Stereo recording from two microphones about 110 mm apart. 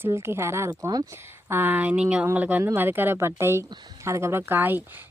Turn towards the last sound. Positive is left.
turn(degrees=-15)  # may be behind; listen again after turning